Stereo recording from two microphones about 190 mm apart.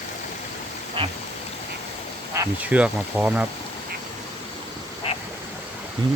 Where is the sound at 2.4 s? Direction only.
5° right (ahead or behind).